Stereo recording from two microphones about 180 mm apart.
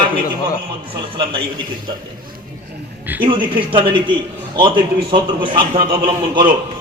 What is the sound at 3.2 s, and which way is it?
Speech, 30° right (ahead or behind).